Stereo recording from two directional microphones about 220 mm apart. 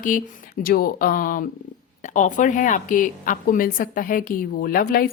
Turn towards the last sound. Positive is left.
turn(degrees=40)  # may be behind; listen again after turning